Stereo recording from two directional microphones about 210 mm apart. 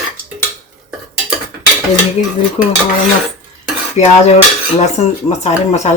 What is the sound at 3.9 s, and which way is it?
Speech, 35° left (ahead or behind).